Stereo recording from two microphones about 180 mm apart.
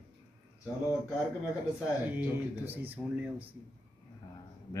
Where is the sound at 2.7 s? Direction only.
10° right (ahead or behind).